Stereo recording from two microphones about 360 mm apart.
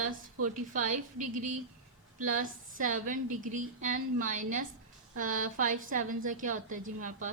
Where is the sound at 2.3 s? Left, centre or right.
Right.